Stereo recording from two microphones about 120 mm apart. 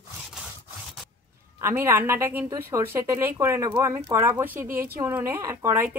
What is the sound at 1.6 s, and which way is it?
A woman's voice, 20° right (ahead or behind).